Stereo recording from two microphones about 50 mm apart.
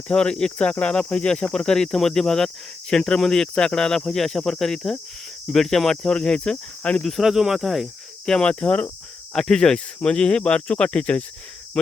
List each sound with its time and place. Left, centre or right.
0.1 s speech: centre
7.1 s speech: centre
8.3 s speech: left
9.3 s speech: centre